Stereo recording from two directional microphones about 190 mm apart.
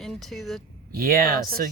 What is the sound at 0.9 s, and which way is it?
Speech, 50° right (ahead or behind).